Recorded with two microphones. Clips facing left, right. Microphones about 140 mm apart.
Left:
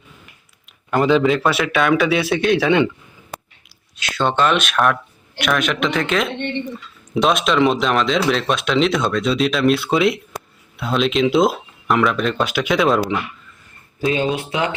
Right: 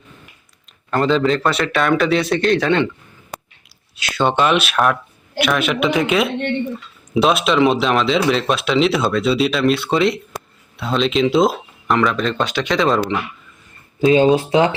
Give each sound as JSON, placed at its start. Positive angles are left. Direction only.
{"t": 0.9, "sound": "speech", "side_deg": 5}
{"t": 3.9, "sound": "speech", "side_deg": -10}
{"t": 14.0, "sound": "speech", "side_deg": -25}